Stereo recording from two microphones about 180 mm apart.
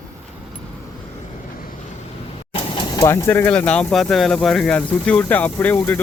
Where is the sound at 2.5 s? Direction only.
25° left (ahead or behind).